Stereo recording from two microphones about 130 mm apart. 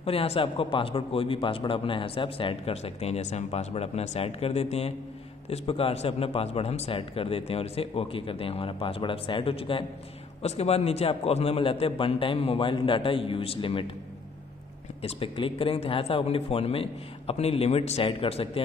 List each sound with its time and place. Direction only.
0.0 s a man's voice: 50° left (ahead or behind)
10.4 s a man's voice: 55° left (ahead or behind)
15.0 s a man's voice: 50° left (ahead or behind)